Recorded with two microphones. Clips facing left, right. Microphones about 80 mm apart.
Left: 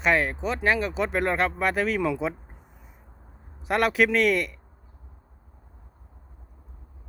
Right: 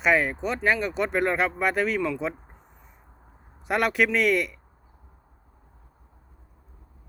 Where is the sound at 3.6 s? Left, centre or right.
Centre.